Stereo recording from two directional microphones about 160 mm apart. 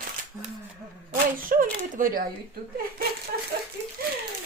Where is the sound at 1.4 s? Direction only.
60° right (ahead or behind).